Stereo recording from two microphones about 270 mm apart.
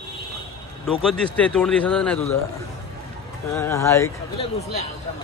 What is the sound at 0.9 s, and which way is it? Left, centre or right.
A man's voice, centre.